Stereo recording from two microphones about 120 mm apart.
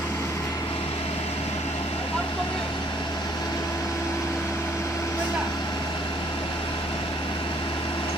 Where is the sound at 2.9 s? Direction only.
35° left (ahead or behind).